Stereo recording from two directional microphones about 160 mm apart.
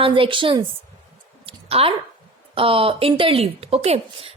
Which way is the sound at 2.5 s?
35° right (ahead or behind).